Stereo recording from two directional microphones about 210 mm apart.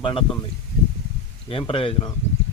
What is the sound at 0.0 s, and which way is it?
Speech, 25° left (ahead or behind).